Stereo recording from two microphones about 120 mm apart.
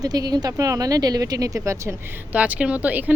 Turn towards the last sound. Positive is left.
turn(degrees=-10)  # may be behind; listen again after turning